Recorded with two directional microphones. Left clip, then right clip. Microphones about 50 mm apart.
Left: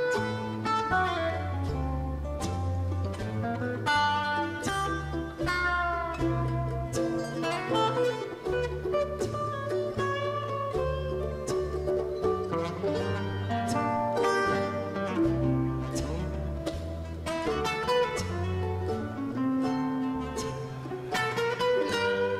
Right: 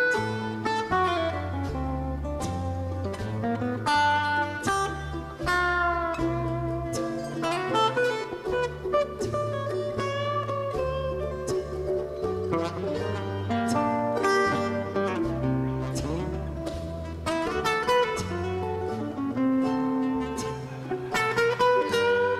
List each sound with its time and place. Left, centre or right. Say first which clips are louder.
0.0 s music: right 4 dB; left
3.4 s music: right 3 dB; left
12.2 s music: right 1 dB; left
17.3 s music: right 3 dB; left
19.3 s music: right 4 dB; left